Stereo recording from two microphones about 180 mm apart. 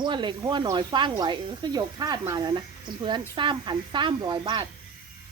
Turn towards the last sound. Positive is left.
turn(degrees=-25)  # may be behind; listen again after turning